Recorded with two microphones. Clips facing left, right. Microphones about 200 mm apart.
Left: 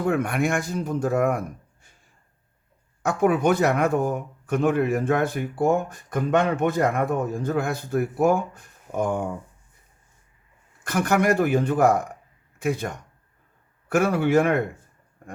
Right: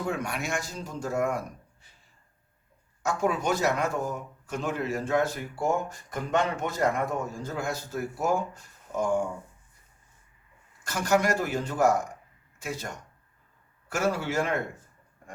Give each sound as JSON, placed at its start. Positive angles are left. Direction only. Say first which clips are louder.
{"t": 0.0, "sound": "speech", "louder": "left 8 dB", "side_deg": 55}
{"t": 3.0, "sound": "speech", "louder": "left 7 dB", "side_deg": 55}
{"t": 10.8, "sound": "speech", "louder": "left 4 dB", "side_deg": 55}